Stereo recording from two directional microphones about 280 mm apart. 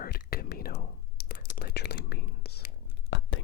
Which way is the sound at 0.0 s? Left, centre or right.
Left.